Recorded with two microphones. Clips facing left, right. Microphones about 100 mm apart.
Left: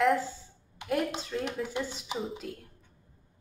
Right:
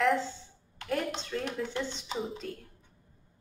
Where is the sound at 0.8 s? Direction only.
5° left (ahead or behind).